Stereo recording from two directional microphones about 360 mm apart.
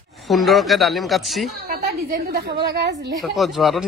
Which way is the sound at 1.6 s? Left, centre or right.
Right.